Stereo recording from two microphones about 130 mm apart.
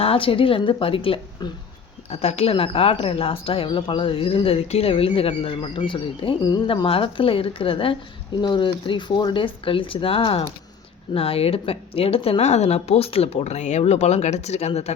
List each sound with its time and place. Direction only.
0.0 s a woman's voice: 45° left (ahead or behind)
6.8 s a woman's voice: 45° left (ahead or behind)